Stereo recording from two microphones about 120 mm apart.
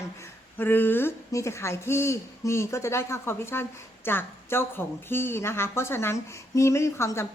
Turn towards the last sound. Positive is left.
turn(degrees=25)  # may be behind; listen again after turning